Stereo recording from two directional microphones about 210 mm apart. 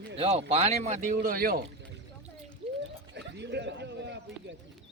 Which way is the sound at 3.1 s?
55° right (ahead or behind).